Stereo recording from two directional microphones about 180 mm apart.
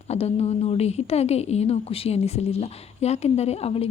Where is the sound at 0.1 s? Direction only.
35° left (ahead or behind).